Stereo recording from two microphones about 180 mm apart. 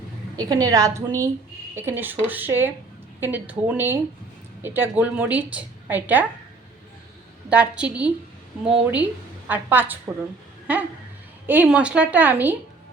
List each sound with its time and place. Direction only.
0.3 s a woman's voice: 20° right (ahead or behind)
7.5 s a woman's voice: 5° right (ahead or behind)